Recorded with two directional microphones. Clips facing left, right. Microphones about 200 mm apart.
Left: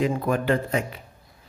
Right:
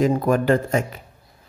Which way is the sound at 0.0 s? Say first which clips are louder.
Right 5 dB; 45° right (ahead or behind).